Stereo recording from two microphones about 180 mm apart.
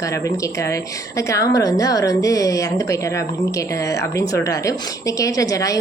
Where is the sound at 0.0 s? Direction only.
15° left (ahead or behind).